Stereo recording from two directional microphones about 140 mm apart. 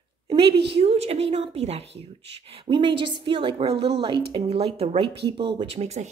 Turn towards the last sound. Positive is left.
turn(degrees=-50)  # may be behind; listen again after turning